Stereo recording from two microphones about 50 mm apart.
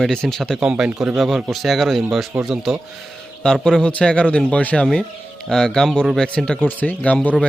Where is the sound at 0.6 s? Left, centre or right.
Centre.